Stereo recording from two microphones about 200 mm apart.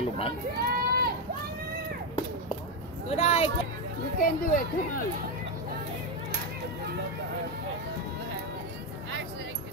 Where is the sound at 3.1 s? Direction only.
30° left (ahead or behind).